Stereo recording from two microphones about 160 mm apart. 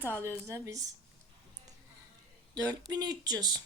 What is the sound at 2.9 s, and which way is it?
Speech, 25° right (ahead or behind).